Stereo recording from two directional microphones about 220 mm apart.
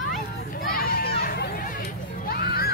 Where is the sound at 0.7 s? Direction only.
40° left (ahead or behind).